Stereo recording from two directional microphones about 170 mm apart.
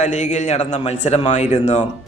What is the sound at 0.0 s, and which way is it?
A man's voice, 45° left (ahead or behind).